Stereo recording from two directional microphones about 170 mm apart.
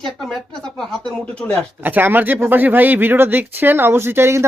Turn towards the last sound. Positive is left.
turn(degrees=-15)  # may be behind; listen again after turning